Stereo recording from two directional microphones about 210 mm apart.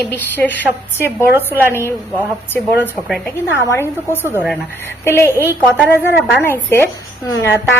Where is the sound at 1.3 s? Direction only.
10° right (ahead or behind).